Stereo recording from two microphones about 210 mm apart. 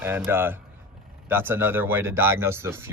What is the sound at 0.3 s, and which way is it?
Speech, 10° right (ahead or behind).